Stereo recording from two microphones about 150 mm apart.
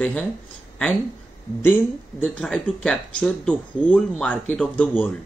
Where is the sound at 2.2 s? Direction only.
5° left (ahead or behind).